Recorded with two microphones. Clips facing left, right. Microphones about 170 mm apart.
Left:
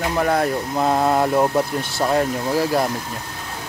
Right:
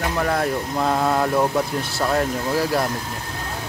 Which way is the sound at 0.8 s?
20° left (ahead or behind).